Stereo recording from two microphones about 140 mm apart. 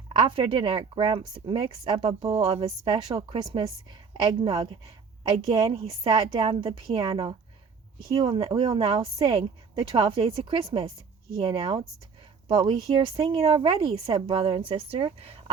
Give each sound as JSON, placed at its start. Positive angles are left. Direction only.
{"t": 0.1, "sound": "speech", "side_deg": -40}